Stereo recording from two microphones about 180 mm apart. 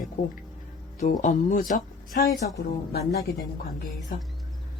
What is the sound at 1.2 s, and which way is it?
Speech, 45° left (ahead or behind).